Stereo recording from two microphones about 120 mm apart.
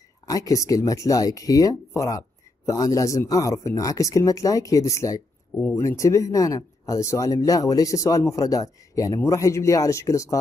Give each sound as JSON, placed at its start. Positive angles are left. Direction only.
{"t": 0.3, "sound": "speech", "side_deg": 30}